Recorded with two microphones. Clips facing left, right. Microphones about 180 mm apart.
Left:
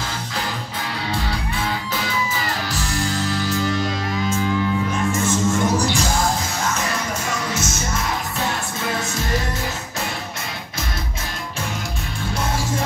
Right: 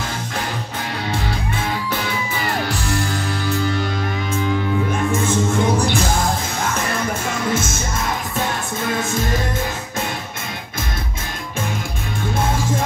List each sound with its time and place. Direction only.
3.3 s music: 60° right (ahead or behind)
5.1 s music: 55° right (ahead or behind)
7.2 s music: 55° right (ahead or behind)
12.4 s music: 55° right (ahead or behind)